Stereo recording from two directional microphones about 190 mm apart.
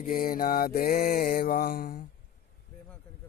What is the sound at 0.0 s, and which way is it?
Mantra, 50° left (ahead or behind).